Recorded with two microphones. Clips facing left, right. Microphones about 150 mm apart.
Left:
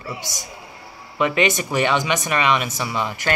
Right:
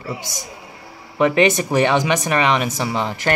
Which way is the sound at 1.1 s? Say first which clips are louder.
Right 4 dB; 35° right (ahead or behind).